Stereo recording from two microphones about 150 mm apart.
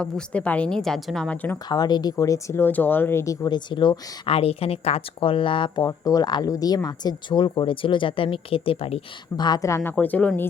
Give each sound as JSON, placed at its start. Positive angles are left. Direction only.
{"t": 0.0, "sound": "a woman's voice", "side_deg": 5}
{"t": 1.7, "sound": "speech", "side_deg": 25}
{"t": 9.4, "sound": "speech", "side_deg": 25}